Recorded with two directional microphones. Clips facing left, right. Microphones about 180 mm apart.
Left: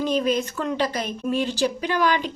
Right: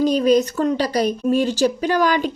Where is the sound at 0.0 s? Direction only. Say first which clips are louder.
Right 7 dB; 40° right (ahead or behind).